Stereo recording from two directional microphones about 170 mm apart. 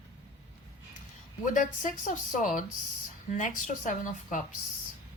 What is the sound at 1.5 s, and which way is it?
Speech, 50° left (ahead or behind).